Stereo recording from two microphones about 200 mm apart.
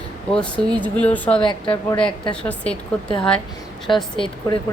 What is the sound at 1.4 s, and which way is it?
Speech, 25° left (ahead or behind).